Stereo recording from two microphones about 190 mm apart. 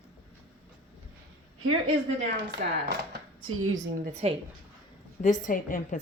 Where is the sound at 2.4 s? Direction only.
60° right (ahead or behind).